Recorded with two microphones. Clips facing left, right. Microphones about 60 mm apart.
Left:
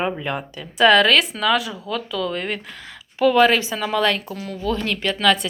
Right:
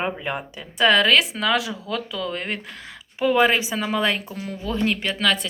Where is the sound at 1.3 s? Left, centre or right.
Right.